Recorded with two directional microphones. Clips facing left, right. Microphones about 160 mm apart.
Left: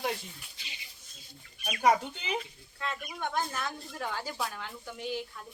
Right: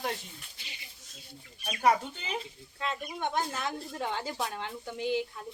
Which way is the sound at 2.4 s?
25° right (ahead or behind).